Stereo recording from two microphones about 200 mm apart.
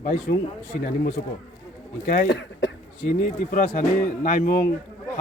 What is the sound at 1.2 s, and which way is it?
A man's voice, 45° left (ahead or behind).